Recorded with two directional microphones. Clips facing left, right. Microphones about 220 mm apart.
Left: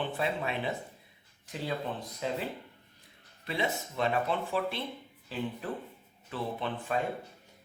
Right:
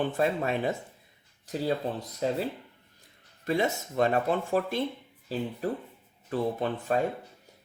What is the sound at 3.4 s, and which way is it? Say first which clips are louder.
Speech: right 6 dB; 45° right (ahead or behind).